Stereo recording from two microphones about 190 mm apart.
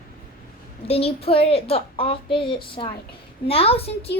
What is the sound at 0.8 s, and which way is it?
A child's voice, 30° left (ahead or behind).